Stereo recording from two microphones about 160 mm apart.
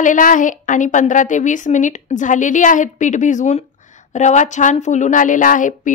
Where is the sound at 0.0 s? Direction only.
55° left (ahead or behind).